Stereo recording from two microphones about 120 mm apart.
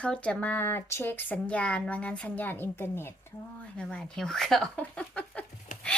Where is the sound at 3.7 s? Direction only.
5° left (ahead or behind).